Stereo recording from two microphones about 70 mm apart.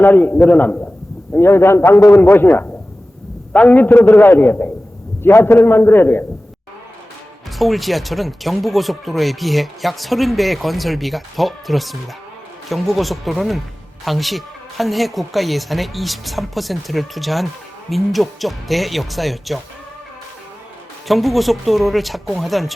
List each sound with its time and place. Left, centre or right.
0.0 s a man's voice: left
1.3 s a man's voice: left
3.5 s a man's voice: centre
3.8 s a man's voice: left
5.2 s a man's voice: left
7.6 s a woman's voice: centre
21.1 s a woman's voice: centre